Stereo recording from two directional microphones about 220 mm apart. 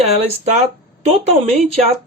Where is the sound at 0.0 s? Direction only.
30° right (ahead or behind).